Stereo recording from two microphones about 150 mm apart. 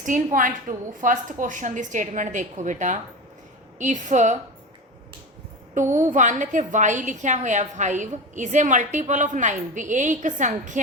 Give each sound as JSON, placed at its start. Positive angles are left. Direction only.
{"t": 0.0, "sound": "a woman's voice", "side_deg": -60}
{"t": 5.9, "sound": "a woman's voice", "side_deg": -55}